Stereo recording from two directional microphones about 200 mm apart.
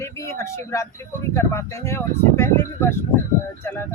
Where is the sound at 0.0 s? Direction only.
15° left (ahead or behind).